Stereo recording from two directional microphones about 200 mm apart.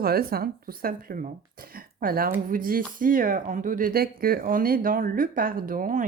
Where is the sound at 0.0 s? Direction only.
50° right (ahead or behind).